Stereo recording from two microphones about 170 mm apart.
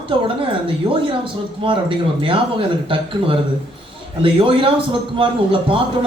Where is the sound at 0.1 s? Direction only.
30° right (ahead or behind).